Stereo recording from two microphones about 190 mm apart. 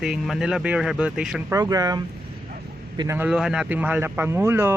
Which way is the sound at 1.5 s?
20° right (ahead or behind).